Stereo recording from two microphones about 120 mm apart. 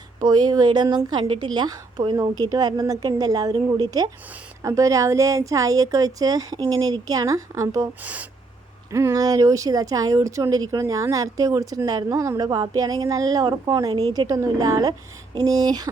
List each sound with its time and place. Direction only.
0.2 s a woman's voice: 35° right (ahead or behind)
8.0 s speech: 10° right (ahead or behind)
8.9 s a woman's voice: 25° right (ahead or behind)